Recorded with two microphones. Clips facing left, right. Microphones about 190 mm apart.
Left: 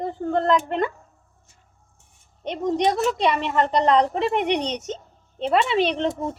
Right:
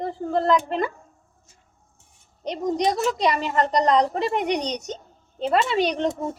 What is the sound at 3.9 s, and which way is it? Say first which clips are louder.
Speech: left 1 dB; 5° left (ahead or behind).